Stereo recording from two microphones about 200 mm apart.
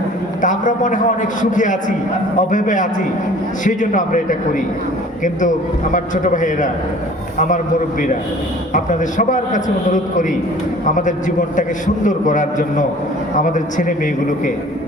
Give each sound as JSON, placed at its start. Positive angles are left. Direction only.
{"t": 0.4, "sound": "a man's voice", "side_deg": 40}
{"t": 8.7, "sound": "a man's voice", "side_deg": 40}